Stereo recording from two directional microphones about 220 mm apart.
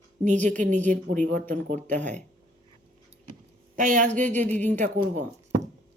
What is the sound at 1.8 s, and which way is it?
Speech, 5° left (ahead or behind).